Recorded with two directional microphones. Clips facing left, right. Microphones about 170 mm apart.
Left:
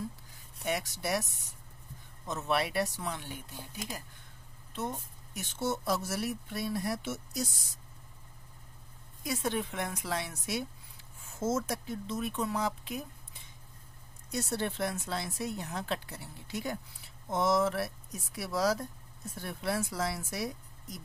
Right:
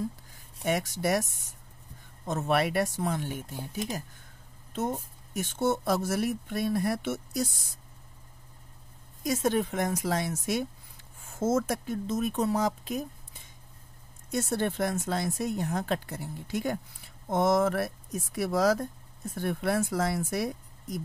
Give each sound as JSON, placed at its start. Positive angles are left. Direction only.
{"t": 0.7, "sound": "speech", "side_deg": -45}
{"t": 2.2, "sound": "speech", "side_deg": -50}
{"t": 9.2, "sound": "speech", "side_deg": -45}
{"t": 14.3, "sound": "speech", "side_deg": -50}